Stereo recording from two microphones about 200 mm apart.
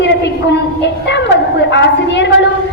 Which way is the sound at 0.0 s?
60° left (ahead or behind).